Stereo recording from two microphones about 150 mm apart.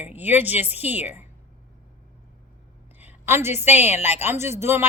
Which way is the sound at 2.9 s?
15° right (ahead or behind).